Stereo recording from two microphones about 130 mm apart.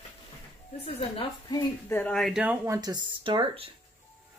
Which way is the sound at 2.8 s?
35° right (ahead or behind).